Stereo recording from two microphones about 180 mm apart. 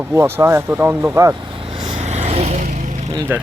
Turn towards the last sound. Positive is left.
turn(degrees=-15)  # may be behind; listen again after turning